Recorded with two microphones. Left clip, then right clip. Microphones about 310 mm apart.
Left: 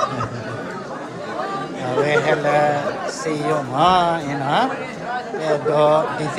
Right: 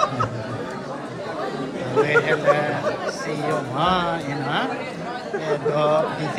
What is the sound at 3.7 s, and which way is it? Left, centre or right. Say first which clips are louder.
Speech: left 7 dB; centre.